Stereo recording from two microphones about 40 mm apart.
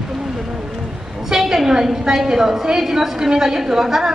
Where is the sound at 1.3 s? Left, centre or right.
Centre.